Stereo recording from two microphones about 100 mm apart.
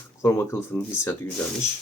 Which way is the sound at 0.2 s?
30° left (ahead or behind).